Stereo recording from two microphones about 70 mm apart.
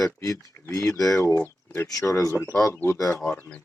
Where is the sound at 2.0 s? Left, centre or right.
Left.